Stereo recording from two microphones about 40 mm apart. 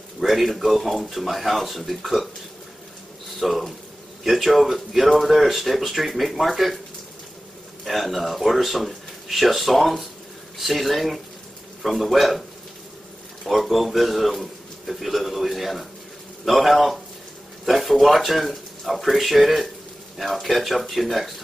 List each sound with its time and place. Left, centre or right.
0.2 s speech: centre
3.3 s speech: centre
7.8 s speech: centre
13.5 s speech: centre